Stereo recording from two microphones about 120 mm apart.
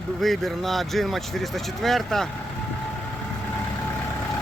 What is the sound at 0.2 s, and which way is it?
Speech, centre (ahead or behind).